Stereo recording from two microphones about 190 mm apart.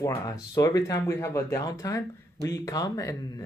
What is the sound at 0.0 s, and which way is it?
Speech, 15° left (ahead or behind).